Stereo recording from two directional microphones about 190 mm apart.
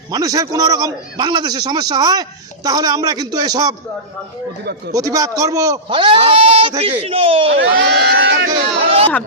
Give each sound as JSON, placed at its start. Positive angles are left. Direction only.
{"t": 0.1, "sound": "a man's voice", "side_deg": -20}
{"t": 4.9, "sound": "a man's voice", "side_deg": -20}
{"t": 7.5, "sound": "speech", "side_deg": -65}